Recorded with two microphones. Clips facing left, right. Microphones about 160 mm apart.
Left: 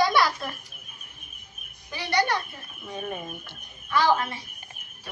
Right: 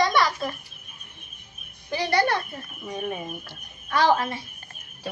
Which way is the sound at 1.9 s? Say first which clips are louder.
Right 3 dB; 50° right (ahead or behind).